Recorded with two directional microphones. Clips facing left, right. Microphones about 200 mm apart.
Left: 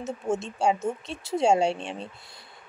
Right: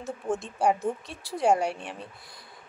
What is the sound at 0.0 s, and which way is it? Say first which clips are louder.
Speech: left 2 dB; 25° left (ahead or behind).